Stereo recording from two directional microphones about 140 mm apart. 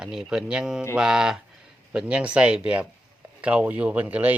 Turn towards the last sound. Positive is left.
turn(degrees=-10)  # may be behind; listen again after turning